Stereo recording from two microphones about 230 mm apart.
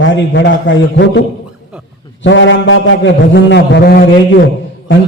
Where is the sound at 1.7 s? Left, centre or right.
Centre.